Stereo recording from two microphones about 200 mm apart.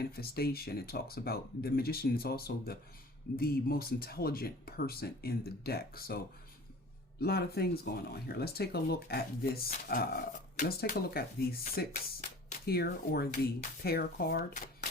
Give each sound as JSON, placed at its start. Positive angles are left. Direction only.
{"t": 0.0, "sound": "speech", "side_deg": 50}